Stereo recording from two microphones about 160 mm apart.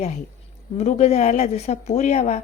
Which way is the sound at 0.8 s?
45° left (ahead or behind).